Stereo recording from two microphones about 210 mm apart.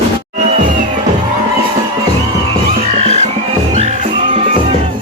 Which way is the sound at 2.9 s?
30° right (ahead or behind).